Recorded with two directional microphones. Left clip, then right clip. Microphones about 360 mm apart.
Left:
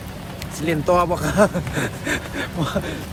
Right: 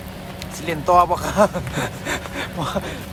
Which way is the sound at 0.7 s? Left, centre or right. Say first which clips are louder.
Right 3 dB; centre.